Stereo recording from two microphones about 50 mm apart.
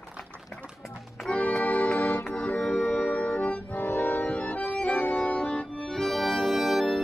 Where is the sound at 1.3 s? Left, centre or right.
Left.